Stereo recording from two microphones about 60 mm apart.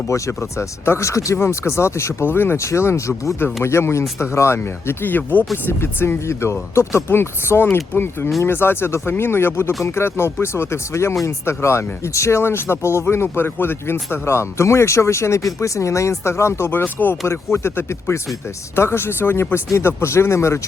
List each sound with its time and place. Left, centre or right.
0.1 s speech: left
2.6 s speech: left
5.1 s speech: left
16.6 s speech: left
17.2 s speech: left